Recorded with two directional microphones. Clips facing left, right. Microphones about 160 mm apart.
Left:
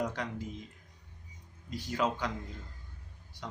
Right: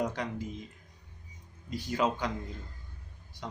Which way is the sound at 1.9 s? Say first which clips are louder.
Right 2 dB; 20° right (ahead or behind).